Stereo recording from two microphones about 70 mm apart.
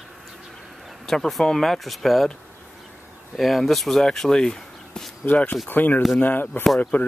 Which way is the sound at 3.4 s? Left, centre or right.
Centre.